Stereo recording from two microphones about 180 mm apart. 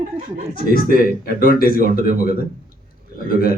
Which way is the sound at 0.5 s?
55° left (ahead or behind).